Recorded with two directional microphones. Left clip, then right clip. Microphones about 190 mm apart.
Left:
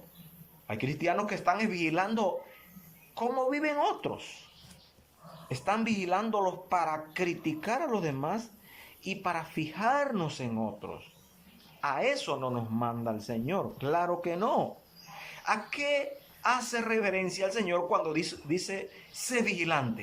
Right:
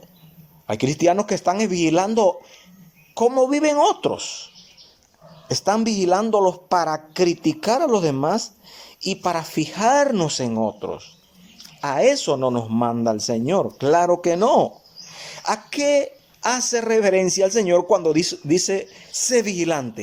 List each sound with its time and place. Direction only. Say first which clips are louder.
0.7 s a man's voice: right 12 dB; 40° right (ahead or behind)
5.5 s a man's voice: right 10 dB; 40° right (ahead or behind)
15.2 s a sound: right 7 dB; 40° right (ahead or behind)
16.7 s a man's voice: right 12 dB; 40° right (ahead or behind)